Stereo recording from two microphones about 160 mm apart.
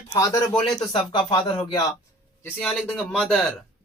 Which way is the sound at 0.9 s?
30° left (ahead or behind).